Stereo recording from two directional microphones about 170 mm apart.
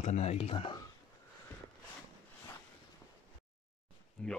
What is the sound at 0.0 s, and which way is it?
Speech, 40° left (ahead or behind).